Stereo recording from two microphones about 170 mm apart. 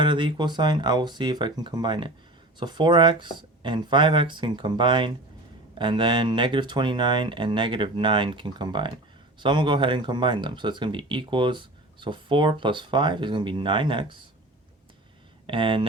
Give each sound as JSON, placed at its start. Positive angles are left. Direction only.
{"t": 0.0, "sound": "speech", "side_deg": -30}
{"t": 15.4, "sound": "speech", "side_deg": -30}